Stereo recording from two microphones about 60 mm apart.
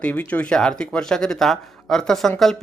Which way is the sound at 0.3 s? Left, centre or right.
Left.